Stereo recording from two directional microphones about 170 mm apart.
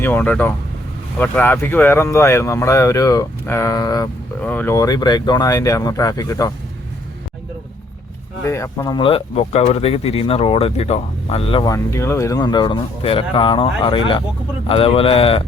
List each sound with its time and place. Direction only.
0.0 s speech: 10° left (ahead or behind)
4.4 s speech: 10° left (ahead or behind)
8.4 s speech: 15° left (ahead or behind)
9.0 s speech: 35° left (ahead or behind)